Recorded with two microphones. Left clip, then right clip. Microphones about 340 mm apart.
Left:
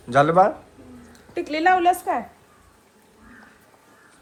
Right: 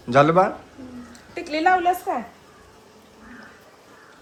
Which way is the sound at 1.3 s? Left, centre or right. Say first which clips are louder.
Even; left.